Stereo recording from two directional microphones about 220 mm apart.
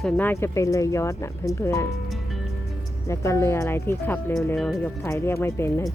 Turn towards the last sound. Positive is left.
turn(degrees=10)  # may be behind; listen again after turning